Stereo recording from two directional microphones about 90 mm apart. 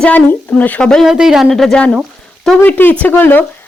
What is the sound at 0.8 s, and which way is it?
Speech, 5° left (ahead or behind).